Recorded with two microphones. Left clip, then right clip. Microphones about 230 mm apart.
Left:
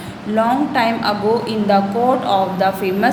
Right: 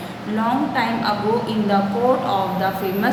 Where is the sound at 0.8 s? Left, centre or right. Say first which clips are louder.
Left 4 dB; left.